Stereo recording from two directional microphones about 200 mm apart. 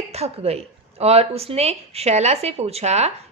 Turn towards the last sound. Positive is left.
turn(degrees=-35)  # may be behind; listen again after turning